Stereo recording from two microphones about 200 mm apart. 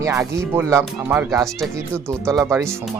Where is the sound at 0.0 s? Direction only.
15° right (ahead or behind).